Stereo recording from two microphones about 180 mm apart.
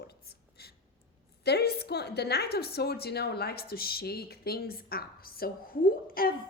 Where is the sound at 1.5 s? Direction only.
65° left (ahead or behind).